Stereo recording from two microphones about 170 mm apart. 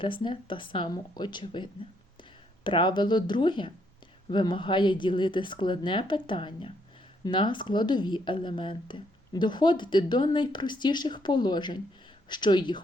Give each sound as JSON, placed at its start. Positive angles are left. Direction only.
{"t": 0.0, "sound": "speech", "side_deg": 30}